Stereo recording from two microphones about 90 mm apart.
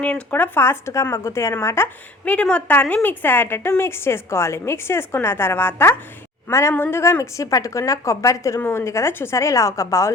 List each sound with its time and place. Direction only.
0.0 s a woman's voice: 15° left (ahead or behind)
2.2 s a woman's voice: 15° left (ahead or behind); by 10.1 s 35° left (ahead or behind)